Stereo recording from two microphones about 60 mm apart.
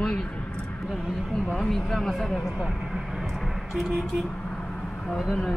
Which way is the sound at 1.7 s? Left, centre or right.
Centre.